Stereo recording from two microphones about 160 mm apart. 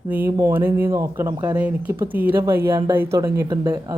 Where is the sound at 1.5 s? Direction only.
10° right (ahead or behind).